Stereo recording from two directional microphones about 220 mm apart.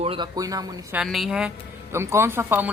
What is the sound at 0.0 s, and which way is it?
Speech, 25° right (ahead or behind).